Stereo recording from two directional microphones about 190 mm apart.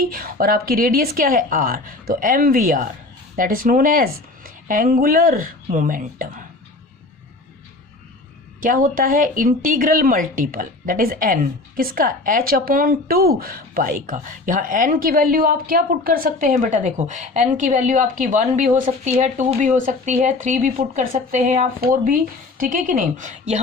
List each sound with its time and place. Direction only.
0.0 s speech: 50° right (ahead or behind)
8.6 s speech: 45° right (ahead or behind)